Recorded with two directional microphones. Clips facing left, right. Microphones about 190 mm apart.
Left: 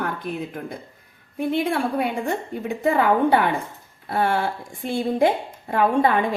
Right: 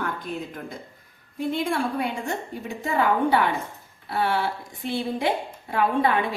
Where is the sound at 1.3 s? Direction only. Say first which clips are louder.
Left 3 dB; 60° left (ahead or behind).